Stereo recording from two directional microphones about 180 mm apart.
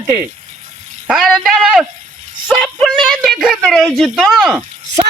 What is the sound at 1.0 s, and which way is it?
A man's voice, centre (ahead or behind).